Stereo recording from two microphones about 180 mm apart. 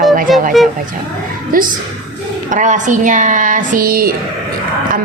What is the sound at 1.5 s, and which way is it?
A woman's voice, 50° right (ahead or behind).